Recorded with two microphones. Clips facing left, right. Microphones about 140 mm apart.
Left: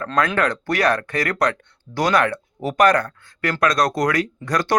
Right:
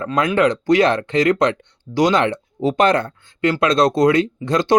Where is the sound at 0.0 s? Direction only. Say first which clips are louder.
Right 4 dB; 20° right (ahead or behind).